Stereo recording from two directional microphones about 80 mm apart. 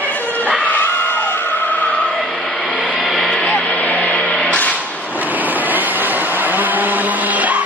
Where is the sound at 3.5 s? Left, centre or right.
Centre.